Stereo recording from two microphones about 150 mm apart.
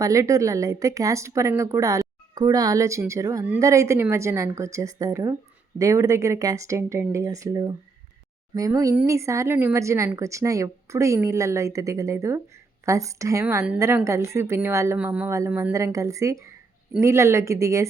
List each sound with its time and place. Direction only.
0.0 s a woman's voice: 20° right (ahead or behind)